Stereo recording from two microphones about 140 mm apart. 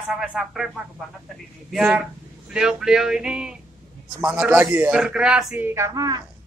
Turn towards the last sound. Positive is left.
turn(degrees=-25)  # may be behind; listen again after turning